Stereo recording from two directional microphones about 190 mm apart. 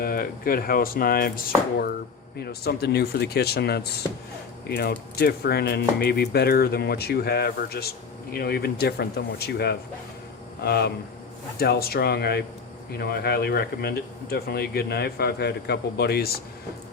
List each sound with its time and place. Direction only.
0.0 s speech: 50° left (ahead or behind)
2.4 s speech: 55° left (ahead or behind)